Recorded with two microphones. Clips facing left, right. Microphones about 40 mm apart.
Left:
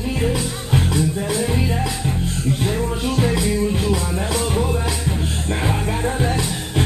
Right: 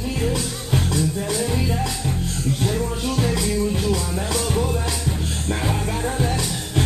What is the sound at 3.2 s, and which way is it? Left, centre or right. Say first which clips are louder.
Music: left 2 dB; centre.